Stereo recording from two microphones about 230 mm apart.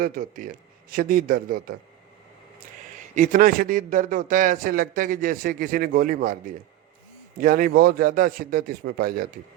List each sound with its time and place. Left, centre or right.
0.0 s speech: right